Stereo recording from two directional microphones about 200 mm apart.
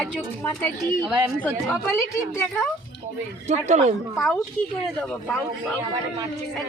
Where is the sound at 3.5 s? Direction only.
35° right (ahead or behind).